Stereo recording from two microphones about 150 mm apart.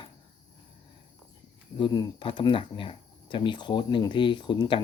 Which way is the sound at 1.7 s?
30° left (ahead or behind).